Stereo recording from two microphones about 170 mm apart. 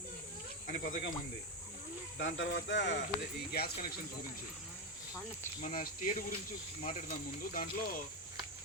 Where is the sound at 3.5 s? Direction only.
70° left (ahead or behind).